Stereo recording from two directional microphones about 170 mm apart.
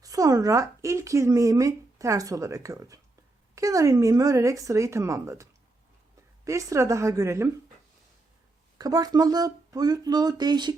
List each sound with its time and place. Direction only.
0.0 s a woman's voice: 20° right (ahead or behind)
8.8 s speech: 20° right (ahead or behind)